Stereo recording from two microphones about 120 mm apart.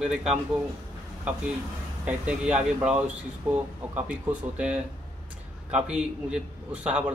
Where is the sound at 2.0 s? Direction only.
10° right (ahead or behind).